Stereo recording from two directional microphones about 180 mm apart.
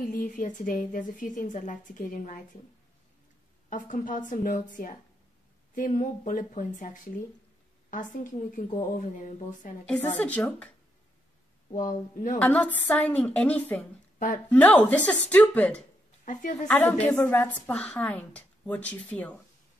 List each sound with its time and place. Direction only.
0.1 s a woman's voice: 50° left (ahead or behind)
3.7 s a woman's voice: 45° left (ahead or behind)
9.8 s a woman's voice: 5° left (ahead or behind)
11.7 s a woman's voice: 50° left (ahead or behind)
12.4 s a woman's voice: 10° left (ahead or behind)